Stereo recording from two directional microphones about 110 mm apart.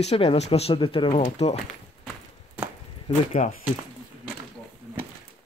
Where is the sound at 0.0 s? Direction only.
65° left (ahead or behind); by 1.1 s 50° left (ahead or behind).